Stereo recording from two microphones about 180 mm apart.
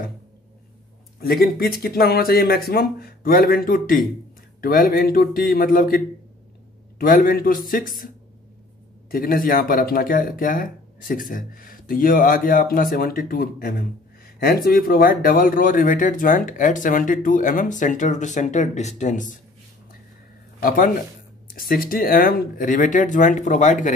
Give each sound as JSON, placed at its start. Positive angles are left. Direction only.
{"t": 1.2, "sound": "speech", "side_deg": 55}
{"t": 9.1, "sound": "speech", "side_deg": 55}
{"t": 20.6, "sound": "speech", "side_deg": 50}